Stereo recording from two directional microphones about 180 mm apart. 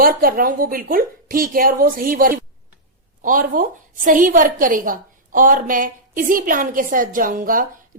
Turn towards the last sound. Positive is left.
turn(degrees=-50)  # may be behind; listen again after turning